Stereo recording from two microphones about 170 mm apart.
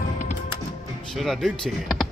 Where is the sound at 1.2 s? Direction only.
Centre (ahead or behind).